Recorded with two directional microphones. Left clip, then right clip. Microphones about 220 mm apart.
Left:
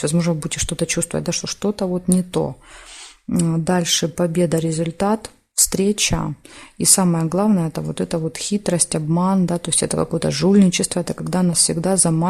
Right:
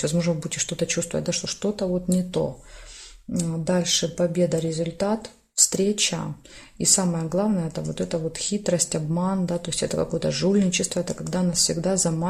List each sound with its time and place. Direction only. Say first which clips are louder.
0.0 s a woman's voice: left 3 dB; 35° left (ahead or behind)